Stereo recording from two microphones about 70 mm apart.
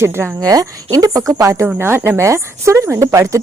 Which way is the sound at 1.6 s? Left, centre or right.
Right.